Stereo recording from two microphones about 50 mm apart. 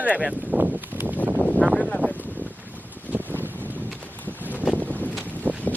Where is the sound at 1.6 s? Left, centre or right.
Right.